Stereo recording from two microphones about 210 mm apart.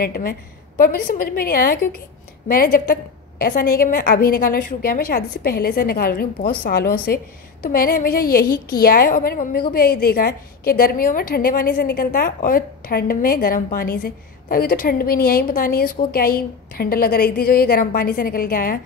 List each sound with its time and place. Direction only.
0.0 s a woman's voice: 45° left (ahead or behind)